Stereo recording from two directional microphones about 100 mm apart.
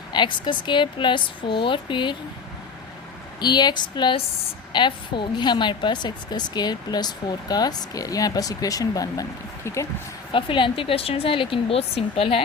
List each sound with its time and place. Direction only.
0.1 s a woman's voice: 50° left (ahead or behind)
3.4 s a woman's voice: 45° left (ahead or behind); by 9.8 s 30° left (ahead or behind)
10.3 s speech: 55° left (ahead or behind)